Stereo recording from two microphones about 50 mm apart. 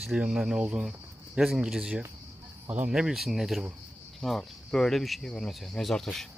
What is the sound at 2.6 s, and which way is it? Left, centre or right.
Speech, right.